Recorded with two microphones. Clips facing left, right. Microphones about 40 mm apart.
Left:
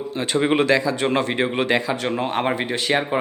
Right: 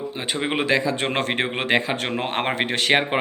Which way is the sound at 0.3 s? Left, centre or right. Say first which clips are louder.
Left 6 dB; centre.